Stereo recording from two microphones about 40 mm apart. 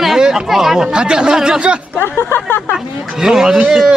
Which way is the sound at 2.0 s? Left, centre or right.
Left.